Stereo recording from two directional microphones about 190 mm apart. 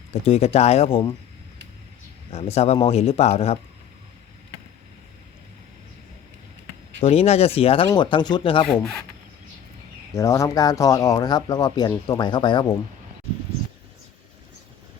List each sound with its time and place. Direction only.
0.1 s speech: 35° left (ahead or behind)
2.3 s speech: 35° left (ahead or behind)
7.0 s speech: 30° left (ahead or behind)
8.6 s speech: 5° left (ahead or behind)
10.2 s speech: 15° left (ahead or behind)